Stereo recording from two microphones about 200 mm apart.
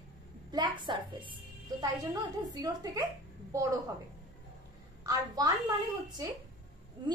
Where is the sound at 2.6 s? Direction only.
20° right (ahead or behind).